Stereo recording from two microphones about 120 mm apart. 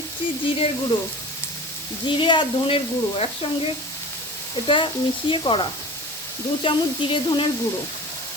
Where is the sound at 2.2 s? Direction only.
40° left (ahead or behind).